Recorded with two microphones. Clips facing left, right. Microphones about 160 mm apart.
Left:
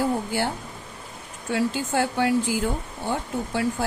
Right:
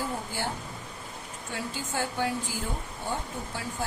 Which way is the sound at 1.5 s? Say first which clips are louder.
Left 9 dB; 75° left (ahead or behind).